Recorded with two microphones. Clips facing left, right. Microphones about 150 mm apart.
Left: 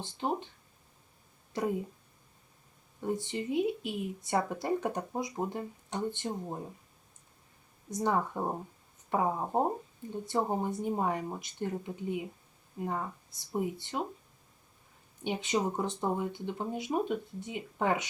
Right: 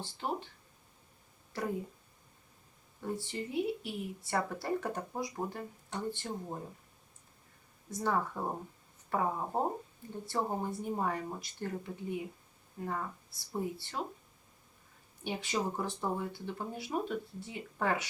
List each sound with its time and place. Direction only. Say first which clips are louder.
0.0 s speech: left 4 dB; 20° left (ahead or behind)
1.5 s speech: left 5 dB; 20° left (ahead or behind)
3.0 s speech: left 4 dB; 20° left (ahead or behind)
7.9 s speech: left 3 dB; 20° left (ahead or behind)
15.2 s speech: left 4 dB; 20° left (ahead or behind)